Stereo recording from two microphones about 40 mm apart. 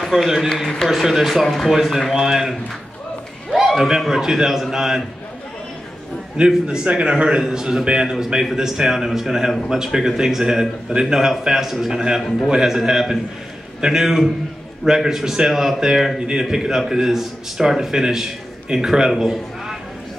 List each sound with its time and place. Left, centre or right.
0.0 s a man's voice: centre
3.5 s a sound: centre
4.1 s a man's voice: centre
6.3 s a man's voice: right; by 19.8 s centre